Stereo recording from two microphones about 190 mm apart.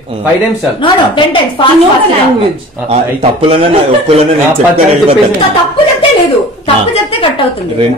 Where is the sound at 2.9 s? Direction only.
30° right (ahead or behind).